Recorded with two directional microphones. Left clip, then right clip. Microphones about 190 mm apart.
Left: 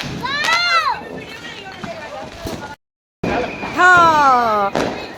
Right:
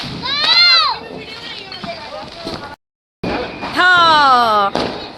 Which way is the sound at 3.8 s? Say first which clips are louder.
Even; 5° left (ahead or behind).